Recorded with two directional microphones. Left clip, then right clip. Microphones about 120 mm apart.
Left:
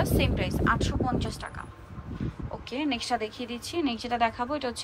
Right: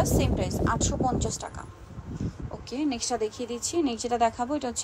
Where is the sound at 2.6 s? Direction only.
25° right (ahead or behind).